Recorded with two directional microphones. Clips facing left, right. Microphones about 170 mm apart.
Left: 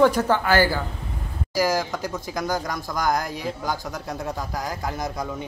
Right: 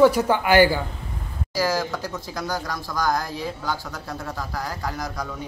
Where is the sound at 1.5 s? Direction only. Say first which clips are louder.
Left 1 dB; 15° left (ahead or behind).